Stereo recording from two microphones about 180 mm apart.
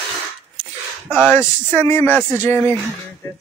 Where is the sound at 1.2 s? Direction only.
10° left (ahead or behind).